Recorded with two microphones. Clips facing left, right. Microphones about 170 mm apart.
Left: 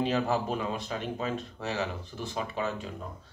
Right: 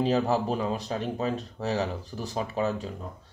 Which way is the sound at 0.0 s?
35° right (ahead or behind).